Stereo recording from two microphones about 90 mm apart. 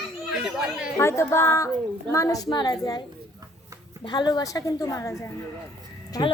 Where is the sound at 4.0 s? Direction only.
55° left (ahead or behind); by 5.3 s 35° left (ahead or behind).